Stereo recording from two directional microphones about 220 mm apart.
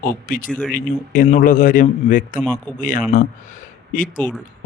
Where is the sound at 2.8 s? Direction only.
40° left (ahead or behind).